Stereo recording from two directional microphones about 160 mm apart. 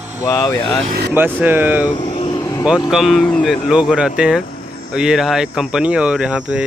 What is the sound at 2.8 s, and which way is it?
Speech, centre (ahead or behind).